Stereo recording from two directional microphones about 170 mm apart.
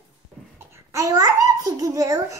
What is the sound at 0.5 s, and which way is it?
Babbling, 15° right (ahead or behind).